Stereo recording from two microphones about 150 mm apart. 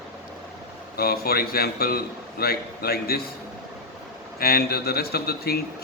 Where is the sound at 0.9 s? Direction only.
90° left.